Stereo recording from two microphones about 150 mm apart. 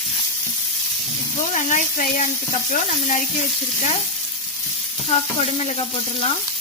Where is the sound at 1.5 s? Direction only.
55° left (ahead or behind).